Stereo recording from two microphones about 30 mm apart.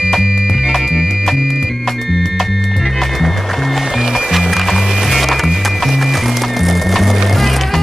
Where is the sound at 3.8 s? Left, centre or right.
Centre.